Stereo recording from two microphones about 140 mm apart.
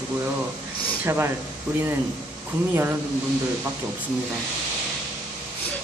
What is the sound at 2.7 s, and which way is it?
Speech, 15° right (ahead or behind).